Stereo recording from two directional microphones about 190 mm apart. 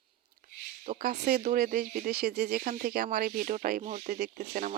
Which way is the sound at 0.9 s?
50° right (ahead or behind).